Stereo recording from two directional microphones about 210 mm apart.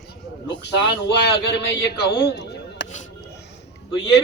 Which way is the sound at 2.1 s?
50° left (ahead or behind).